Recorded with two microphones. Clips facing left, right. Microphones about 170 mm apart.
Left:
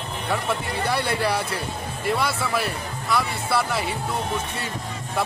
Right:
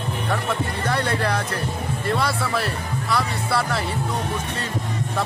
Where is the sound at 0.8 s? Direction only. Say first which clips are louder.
Even; 10° left (ahead or behind).